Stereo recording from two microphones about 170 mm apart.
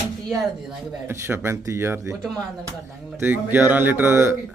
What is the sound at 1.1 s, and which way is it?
A woman's voice, 15° right (ahead or behind).